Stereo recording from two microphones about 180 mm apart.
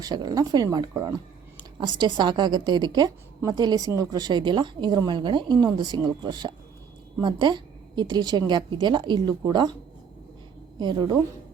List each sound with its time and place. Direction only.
0.0 s a woman's voice: 25° right (ahead or behind)
10.8 s a woman's voice: 25° right (ahead or behind)